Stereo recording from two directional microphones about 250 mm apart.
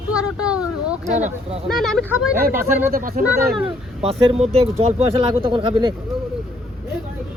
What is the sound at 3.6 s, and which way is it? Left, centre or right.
Speech, right.